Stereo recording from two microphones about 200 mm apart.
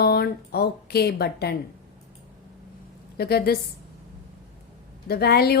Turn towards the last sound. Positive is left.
turn(degrees=50)  # may be behind; listen again after turning